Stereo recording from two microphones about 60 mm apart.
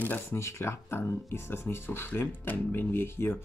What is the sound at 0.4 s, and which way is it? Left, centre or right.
Speech, left.